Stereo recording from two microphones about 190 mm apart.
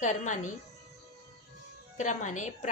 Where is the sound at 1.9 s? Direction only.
40° left (ahead or behind).